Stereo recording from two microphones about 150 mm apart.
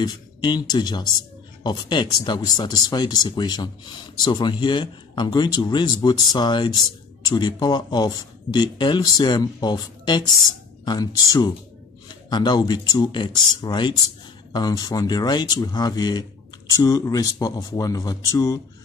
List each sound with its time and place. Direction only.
0.0 s speech: 30° left (ahead or behind)
12.1 s speech: 30° left (ahead or behind)